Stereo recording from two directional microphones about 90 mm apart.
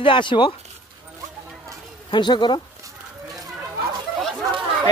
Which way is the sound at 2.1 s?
60° left (ahead or behind).